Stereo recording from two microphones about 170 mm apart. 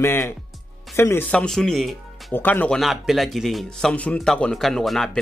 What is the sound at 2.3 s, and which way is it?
A man's voice, 10° left (ahead or behind).